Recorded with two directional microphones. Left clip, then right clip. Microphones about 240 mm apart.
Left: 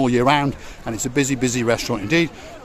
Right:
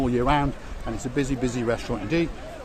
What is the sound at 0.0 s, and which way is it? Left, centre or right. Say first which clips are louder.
Speech: left 6 dB; left.